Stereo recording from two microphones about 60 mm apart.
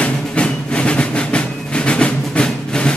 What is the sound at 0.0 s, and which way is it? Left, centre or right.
Music, centre.